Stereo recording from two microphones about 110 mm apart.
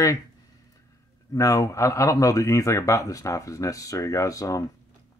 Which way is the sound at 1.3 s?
30° left (ahead or behind).